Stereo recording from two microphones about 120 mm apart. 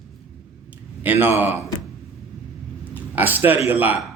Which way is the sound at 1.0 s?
15° right (ahead or behind).